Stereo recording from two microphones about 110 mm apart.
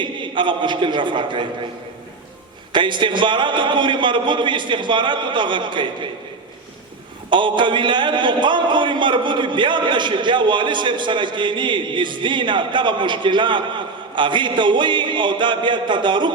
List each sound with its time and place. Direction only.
0.0 s a man's voice: 45° right (ahead or behind)
2.7 s a man's voice: 45° right (ahead or behind)
7.3 s a man's voice: 45° right (ahead or behind)